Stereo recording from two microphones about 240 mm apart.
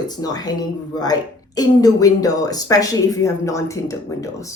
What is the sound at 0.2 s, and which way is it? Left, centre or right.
Speech, centre.